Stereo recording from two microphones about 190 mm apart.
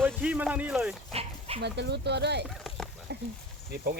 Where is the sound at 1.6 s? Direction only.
65° right (ahead or behind).